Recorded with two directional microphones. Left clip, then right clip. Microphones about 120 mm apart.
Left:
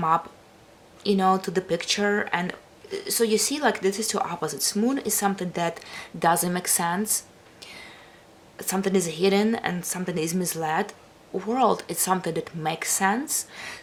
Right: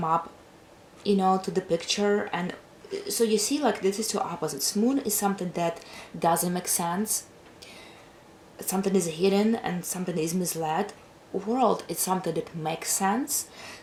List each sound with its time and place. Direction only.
1.0 s speech: 30° left (ahead or behind)